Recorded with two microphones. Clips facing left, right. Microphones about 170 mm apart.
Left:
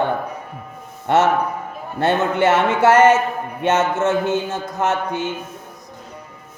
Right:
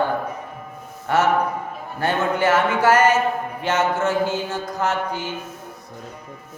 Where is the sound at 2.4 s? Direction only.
25° left (ahead or behind).